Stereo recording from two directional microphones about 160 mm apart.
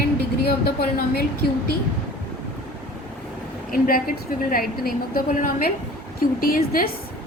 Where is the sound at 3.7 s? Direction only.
60° left (ahead or behind).